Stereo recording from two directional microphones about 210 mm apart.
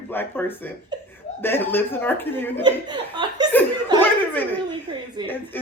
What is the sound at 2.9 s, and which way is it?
Speech, 20° right (ahead or behind).